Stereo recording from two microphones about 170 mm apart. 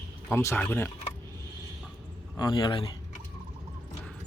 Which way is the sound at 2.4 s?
25° left (ahead or behind).